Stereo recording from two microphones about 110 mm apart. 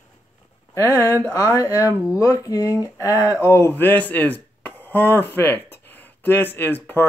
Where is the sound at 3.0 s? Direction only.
30° left (ahead or behind).